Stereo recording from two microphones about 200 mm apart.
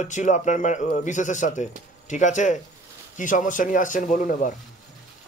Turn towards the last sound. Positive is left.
turn(degrees=40)  # may be behind; listen again after turning